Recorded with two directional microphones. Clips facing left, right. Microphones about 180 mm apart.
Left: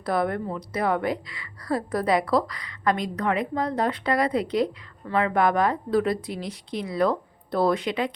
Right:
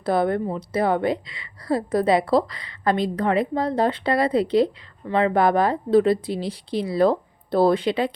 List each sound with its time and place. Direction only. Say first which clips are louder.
0.0 s a woman's voice: right 4 dB; 25° right (ahead or behind)